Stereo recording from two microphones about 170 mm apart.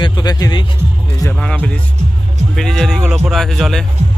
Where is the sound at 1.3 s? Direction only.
5° left (ahead or behind).